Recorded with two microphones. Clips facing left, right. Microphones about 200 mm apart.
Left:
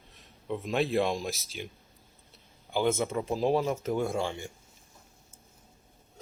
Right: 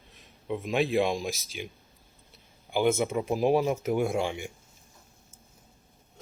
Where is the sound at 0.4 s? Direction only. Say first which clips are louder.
Right 2 dB; 5° right (ahead or behind).